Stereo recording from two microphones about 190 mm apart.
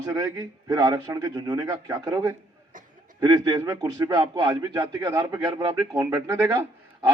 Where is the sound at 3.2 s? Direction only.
25° right (ahead or behind).